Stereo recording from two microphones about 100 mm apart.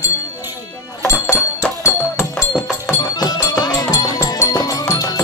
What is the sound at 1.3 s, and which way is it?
Music, 30° left (ahead or behind).